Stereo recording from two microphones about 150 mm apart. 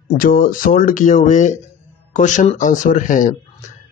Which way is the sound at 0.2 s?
65° left (ahead or behind).